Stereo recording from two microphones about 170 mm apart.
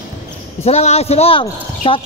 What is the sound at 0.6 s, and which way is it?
A man's voice, 40° left (ahead or behind).